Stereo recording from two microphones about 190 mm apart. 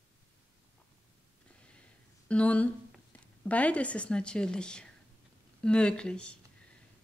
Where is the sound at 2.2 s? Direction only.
5° left (ahead or behind).